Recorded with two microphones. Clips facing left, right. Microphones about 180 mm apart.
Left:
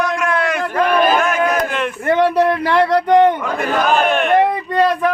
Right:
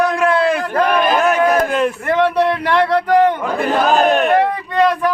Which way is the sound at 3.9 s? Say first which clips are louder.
Right 2 dB; 40° right (ahead or behind).